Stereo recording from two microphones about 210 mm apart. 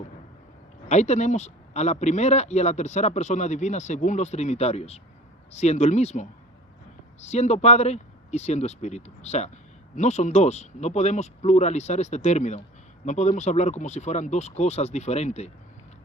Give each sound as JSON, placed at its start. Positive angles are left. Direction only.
{"t": 0.9, "sound": "a man's voice", "side_deg": 35}